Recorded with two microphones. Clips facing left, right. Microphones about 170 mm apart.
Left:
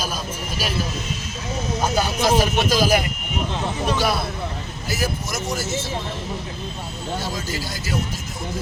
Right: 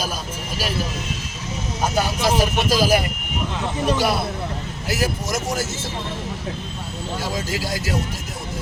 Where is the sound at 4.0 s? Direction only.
10° right (ahead or behind).